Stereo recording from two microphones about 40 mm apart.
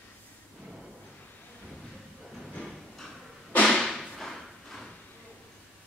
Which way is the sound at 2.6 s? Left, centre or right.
Centre.